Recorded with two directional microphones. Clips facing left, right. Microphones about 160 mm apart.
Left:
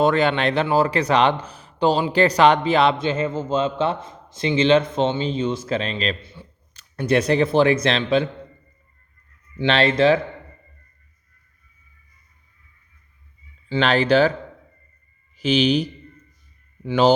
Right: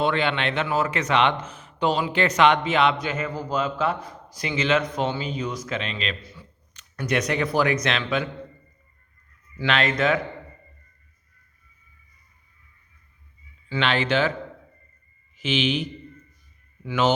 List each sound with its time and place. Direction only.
0.0 s speech: 40° left (ahead or behind)
9.6 s speech: 30° left (ahead or behind)
13.7 s speech: 35° left (ahead or behind)
15.4 s speech: 40° left (ahead or behind)